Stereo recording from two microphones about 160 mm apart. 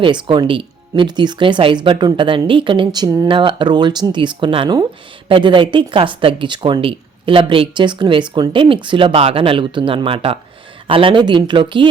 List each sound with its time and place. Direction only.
0.0 s speech: 30° right (ahead or behind)